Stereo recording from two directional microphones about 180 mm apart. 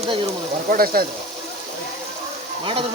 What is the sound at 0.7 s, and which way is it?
Speech, 55° right (ahead or behind).